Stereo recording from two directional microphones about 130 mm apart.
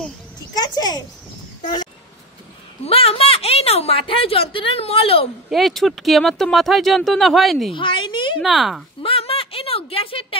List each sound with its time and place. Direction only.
0.6 s a sound: 30° left (ahead or behind)
2.8 s a woman's voice: 50° left (ahead or behind)
5.5 s speech: centre (ahead or behind)
7.7 s a woman's voice: 40° left (ahead or behind)
8.4 s speech: centre (ahead or behind)
9.0 s a sound: 45° left (ahead or behind)